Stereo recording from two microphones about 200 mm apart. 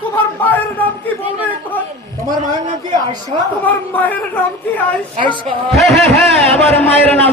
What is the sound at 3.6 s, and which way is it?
A man's voice, 10° left (ahead or behind).